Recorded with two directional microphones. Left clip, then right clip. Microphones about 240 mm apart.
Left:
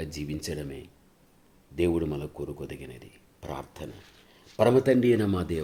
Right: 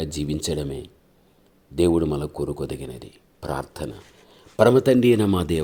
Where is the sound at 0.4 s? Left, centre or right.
Right.